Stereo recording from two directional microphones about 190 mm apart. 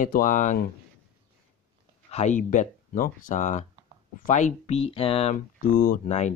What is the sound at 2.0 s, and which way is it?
Speech, 35° left (ahead or behind).